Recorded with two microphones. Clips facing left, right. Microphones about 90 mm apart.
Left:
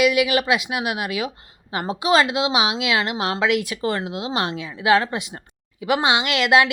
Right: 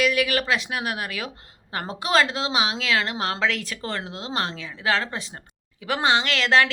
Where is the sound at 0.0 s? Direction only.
10° left (ahead or behind).